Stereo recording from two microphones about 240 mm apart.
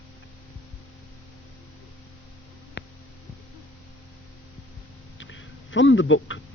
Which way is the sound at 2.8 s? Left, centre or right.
Left.